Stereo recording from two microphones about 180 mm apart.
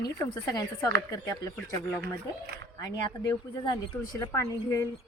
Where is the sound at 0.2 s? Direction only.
20° left (ahead or behind).